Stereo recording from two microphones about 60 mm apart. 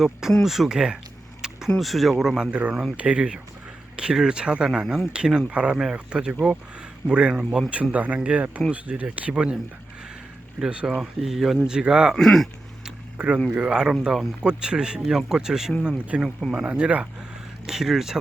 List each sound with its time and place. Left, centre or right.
0.0 s speech: centre
1.8 s speech: centre
7.9 s speech: right
10.6 s speech: centre
12.1 s speech: centre
13.1 s speech: centre
17.7 s speech: centre